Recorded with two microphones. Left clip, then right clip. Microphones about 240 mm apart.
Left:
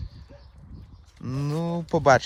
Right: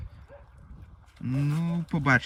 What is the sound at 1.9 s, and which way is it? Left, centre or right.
Speech, centre.